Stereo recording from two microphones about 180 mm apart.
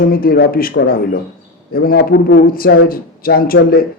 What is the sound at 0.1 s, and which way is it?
A man's voice, 55° left (ahead or behind).